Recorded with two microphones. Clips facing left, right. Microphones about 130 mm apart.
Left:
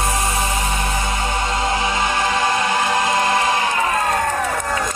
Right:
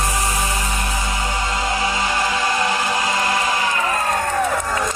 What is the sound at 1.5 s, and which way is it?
Music, 25° left (ahead or behind).